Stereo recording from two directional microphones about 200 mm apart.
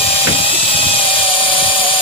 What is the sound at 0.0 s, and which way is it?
Helicopter, 30° left (ahead or behind).